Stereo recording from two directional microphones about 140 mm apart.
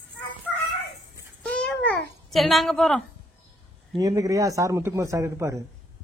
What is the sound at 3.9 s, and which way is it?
A man's voice, 25° right (ahead or behind).